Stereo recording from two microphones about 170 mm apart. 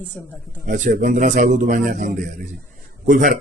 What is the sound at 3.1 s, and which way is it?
Speech, 50° right (ahead or behind).